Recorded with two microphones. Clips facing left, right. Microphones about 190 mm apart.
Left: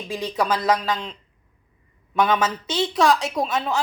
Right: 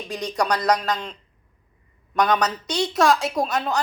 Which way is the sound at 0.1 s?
5° left (ahead or behind).